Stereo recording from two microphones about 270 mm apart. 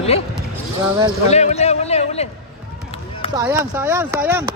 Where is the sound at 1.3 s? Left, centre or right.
Left.